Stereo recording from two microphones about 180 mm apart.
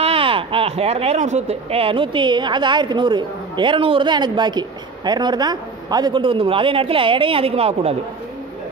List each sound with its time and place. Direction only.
0.0 s speech: 30° right (ahead or behind)